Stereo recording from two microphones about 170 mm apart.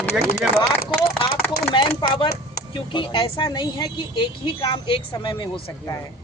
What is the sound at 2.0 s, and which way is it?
Speech, 30° left (ahead or behind).